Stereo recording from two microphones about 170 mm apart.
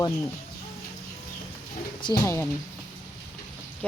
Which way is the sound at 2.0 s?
25° left (ahead or behind).